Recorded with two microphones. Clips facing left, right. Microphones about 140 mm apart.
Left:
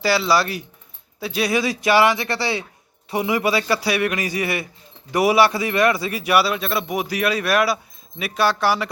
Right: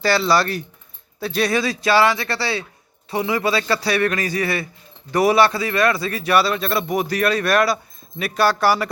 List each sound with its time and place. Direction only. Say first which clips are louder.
0.0 s a man's voice: right 1 dB; 5° left (ahead or behind)